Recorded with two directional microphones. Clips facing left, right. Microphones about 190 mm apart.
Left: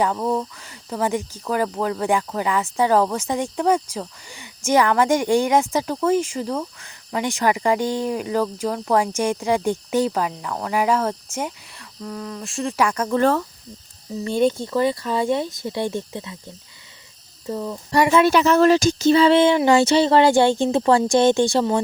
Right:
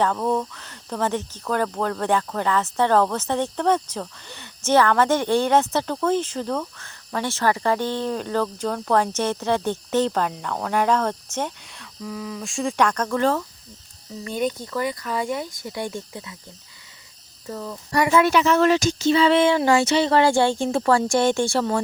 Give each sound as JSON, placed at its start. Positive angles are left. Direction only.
{"t": 0.0, "sound": "speech", "side_deg": 10}
{"t": 14.3, "sound": "speech", "side_deg": 30}
{"t": 17.4, "sound": "speech", "side_deg": 15}